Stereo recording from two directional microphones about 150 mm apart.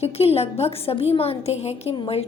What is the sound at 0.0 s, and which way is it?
A woman's voice, 40° left (ahead or behind).